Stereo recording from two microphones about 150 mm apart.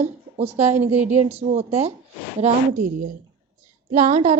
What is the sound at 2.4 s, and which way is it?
A woman's voice, 60° right (ahead or behind).